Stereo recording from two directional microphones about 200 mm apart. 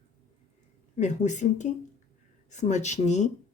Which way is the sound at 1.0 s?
35° left (ahead or behind).